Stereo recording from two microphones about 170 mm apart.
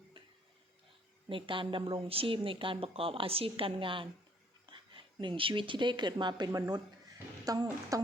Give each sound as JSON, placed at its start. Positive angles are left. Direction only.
{"t": 1.3, "sound": "speech", "side_deg": -30}